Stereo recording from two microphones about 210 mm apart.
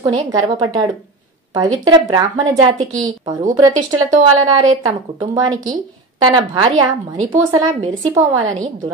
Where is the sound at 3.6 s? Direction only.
20° right (ahead or behind).